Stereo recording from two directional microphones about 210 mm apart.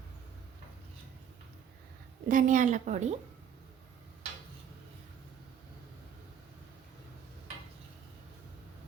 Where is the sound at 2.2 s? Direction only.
40° right (ahead or behind).